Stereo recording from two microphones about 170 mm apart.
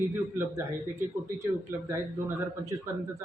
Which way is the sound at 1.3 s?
15° right (ahead or behind).